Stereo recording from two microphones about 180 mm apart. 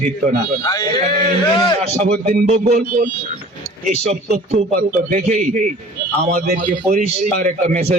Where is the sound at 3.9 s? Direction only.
40° right (ahead or behind).